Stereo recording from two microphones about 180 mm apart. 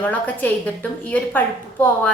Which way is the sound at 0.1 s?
10° left (ahead or behind).